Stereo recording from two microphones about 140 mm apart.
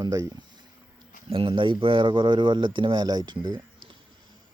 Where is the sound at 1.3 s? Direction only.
40° right (ahead or behind).